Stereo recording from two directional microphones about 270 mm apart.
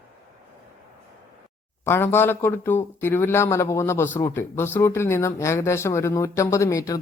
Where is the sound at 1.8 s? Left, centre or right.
Centre.